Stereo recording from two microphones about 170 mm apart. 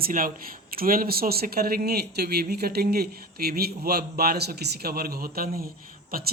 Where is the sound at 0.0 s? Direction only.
55° right (ahead or behind).